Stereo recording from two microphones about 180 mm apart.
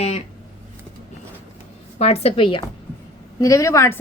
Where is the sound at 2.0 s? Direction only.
35° left (ahead or behind).